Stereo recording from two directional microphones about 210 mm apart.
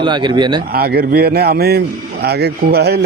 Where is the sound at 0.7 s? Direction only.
45° right (ahead or behind).